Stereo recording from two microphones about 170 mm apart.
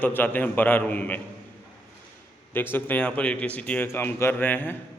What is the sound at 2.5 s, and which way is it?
A man's voice, 10° left (ahead or behind).